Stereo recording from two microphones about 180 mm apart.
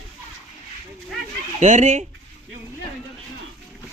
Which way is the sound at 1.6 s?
40° right (ahead or behind).